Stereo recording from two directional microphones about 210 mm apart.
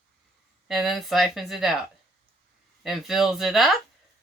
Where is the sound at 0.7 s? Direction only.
Centre (ahead or behind).